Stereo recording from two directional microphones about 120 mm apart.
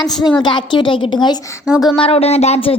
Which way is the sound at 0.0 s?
35° left (ahead or behind).